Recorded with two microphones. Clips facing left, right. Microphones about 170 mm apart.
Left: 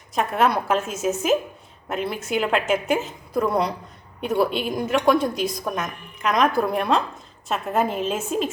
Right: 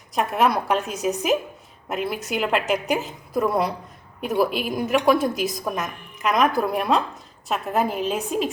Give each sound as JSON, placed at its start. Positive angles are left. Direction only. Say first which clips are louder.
{"t": 0.1, "sound": "a woman's voice", "louder": "even", "side_deg": 0}